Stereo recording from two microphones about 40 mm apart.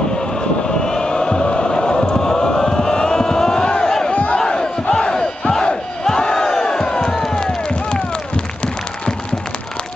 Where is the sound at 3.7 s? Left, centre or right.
Left.